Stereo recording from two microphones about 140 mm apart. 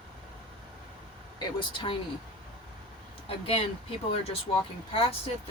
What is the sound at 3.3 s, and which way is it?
Speech, 40° left (ahead or behind).